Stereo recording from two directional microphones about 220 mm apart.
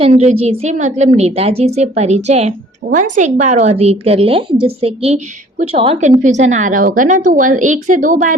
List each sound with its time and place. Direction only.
0.0 s a woman's voice: 30° right (ahead or behind)